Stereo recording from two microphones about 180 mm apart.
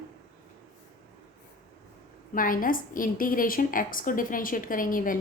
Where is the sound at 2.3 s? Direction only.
50° left (ahead or behind).